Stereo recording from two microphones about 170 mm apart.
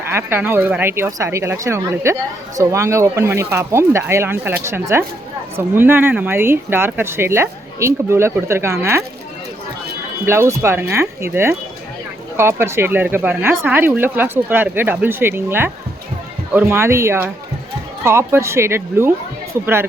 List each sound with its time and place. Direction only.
0.1 s speech: 15° right (ahead or behind)
10.2 s speech: 15° right (ahead or behind)